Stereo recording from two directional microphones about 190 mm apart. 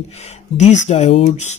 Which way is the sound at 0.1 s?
35° left (ahead or behind).